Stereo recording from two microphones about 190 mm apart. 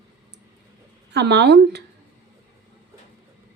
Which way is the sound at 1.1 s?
65° right (ahead or behind).